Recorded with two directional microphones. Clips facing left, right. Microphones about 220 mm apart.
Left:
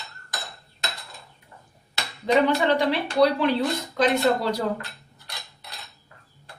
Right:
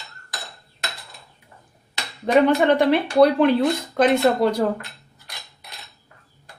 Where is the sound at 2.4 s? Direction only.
55° right (ahead or behind).